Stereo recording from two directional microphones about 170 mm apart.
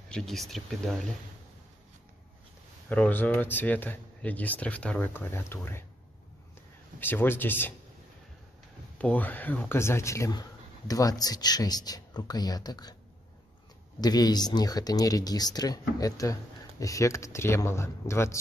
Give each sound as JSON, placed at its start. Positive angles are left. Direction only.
{"t": 0.1, "sound": "speech", "side_deg": 0}
{"t": 2.9, "sound": "speech", "side_deg": 10}
{"t": 7.0, "sound": "speech", "side_deg": 10}
{"t": 8.9, "sound": "speech", "side_deg": 10}
{"t": 14.0, "sound": "speech", "side_deg": 25}